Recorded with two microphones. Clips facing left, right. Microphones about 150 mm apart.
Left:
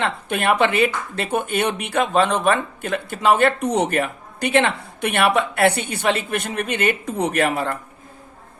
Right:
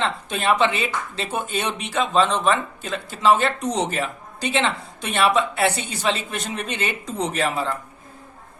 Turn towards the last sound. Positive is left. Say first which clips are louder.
# left 3 dB
turn(degrees=60)  # may be behind; listen again after turning